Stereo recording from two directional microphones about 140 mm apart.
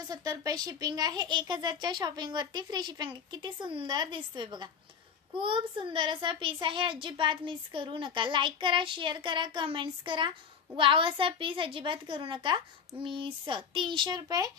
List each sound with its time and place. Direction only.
0.1 s a child's voice: 25° right (ahead or behind)